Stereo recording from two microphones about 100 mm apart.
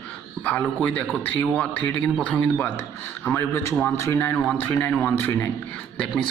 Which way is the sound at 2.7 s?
25° left (ahead or behind).